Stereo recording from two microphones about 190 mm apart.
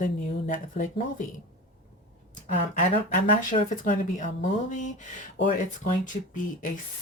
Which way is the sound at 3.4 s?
40° left (ahead or behind).